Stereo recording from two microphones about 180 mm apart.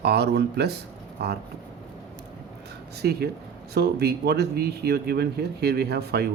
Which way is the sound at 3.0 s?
60° right (ahead or behind).